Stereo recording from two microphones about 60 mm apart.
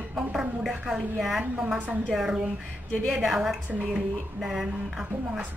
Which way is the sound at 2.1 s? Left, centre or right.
Centre.